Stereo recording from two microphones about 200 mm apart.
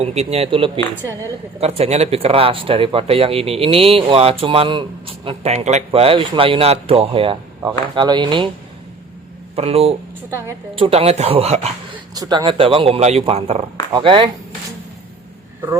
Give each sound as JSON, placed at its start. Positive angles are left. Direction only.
{"t": 0.0, "sound": "speech", "side_deg": -30}
{"t": 9.6, "sound": "speech", "side_deg": -30}
{"t": 10.2, "sound": "a woman's voice", "side_deg": -15}
{"t": 10.8, "sound": "speech", "side_deg": -30}
{"t": 12.1, "sound": "speech", "side_deg": -20}